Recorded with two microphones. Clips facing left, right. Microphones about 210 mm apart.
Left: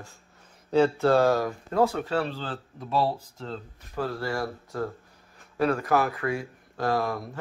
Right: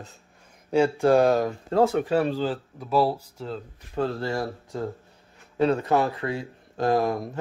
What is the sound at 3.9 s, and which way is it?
Speech, 25° right (ahead or behind).